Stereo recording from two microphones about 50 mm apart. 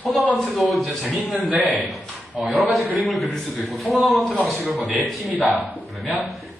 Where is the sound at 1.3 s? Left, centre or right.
Right.